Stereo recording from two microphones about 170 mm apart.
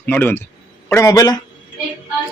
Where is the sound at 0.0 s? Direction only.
10° left (ahead or behind).